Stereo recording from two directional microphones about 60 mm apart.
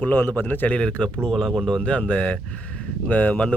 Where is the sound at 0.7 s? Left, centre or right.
Centre.